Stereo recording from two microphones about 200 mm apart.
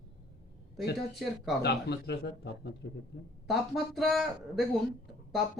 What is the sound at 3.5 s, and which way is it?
Speech, centre (ahead or behind).